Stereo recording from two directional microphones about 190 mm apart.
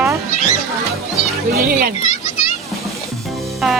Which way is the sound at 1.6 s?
50° right (ahead or behind).